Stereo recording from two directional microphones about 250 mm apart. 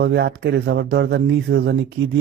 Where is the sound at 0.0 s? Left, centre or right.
Right.